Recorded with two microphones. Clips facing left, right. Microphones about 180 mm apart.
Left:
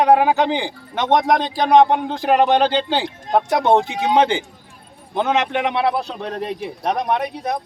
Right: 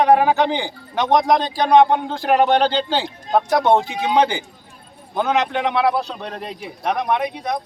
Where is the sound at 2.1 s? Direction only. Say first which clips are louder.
Even; 15° left (ahead or behind).